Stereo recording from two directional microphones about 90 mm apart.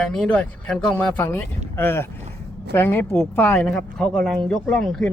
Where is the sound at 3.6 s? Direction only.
5° left (ahead or behind).